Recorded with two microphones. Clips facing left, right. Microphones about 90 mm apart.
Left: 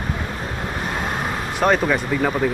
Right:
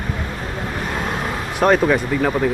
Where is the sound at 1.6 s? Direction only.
Centre (ahead or behind).